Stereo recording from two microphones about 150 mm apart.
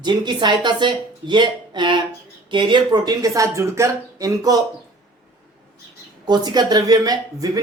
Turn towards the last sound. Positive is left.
turn(degrees=-25)  # may be behind; listen again after turning